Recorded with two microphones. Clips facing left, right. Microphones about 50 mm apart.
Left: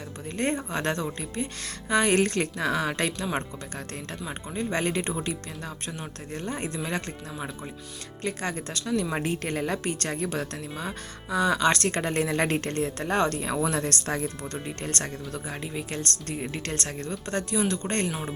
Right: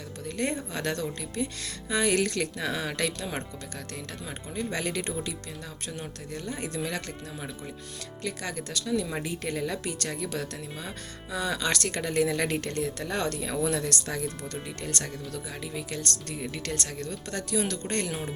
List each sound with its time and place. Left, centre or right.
0.3 s speech: left
4.3 s speech: left
8.2 s speech: left
18.1 s speech: centre